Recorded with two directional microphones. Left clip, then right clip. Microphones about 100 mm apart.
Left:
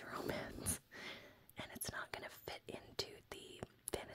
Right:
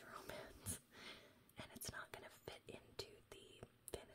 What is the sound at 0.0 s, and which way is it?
Whispering, 40° left (ahead or behind).